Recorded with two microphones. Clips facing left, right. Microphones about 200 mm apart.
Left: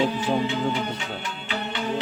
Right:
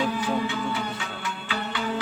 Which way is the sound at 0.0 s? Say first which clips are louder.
Left 3 dB; 20° left (ahead or behind).